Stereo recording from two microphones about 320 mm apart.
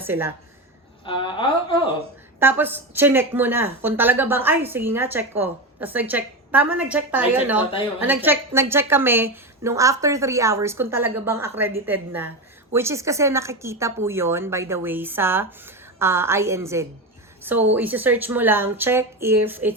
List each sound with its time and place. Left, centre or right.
0.0 s a woman's voice: centre
1.0 s a woman's voice: centre
2.4 s a woman's voice: centre